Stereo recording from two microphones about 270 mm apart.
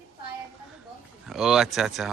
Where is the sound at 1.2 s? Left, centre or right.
Centre.